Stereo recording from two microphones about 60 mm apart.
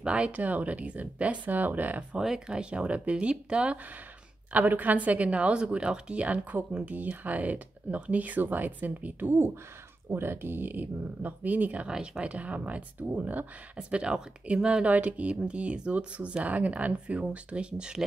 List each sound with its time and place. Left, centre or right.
0.0 s a woman's voice: centre
2.1 s speech: centre
4.5 s a woman's voice: right
11.9 s a woman's voice: centre